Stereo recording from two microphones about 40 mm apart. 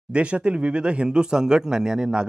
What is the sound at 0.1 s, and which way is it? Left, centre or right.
Speech, right.